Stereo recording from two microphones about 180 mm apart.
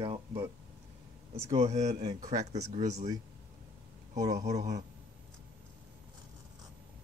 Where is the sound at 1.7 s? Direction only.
40° right (ahead or behind).